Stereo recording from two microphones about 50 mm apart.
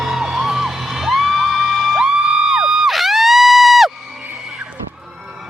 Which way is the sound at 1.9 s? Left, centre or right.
Centre.